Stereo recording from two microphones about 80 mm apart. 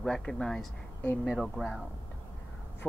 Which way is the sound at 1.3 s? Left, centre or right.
Centre.